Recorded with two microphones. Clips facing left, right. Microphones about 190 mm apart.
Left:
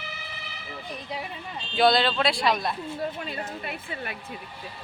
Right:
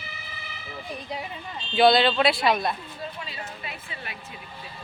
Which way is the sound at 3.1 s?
50° left (ahead or behind).